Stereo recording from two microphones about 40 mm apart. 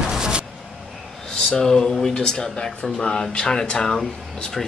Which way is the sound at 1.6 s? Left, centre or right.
Centre.